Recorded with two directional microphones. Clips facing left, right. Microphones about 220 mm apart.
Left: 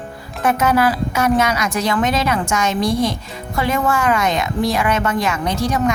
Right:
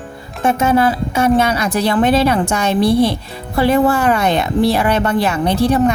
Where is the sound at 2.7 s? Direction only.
60° right (ahead or behind).